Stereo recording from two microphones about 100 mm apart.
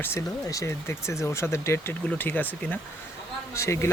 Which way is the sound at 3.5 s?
30° left (ahead or behind).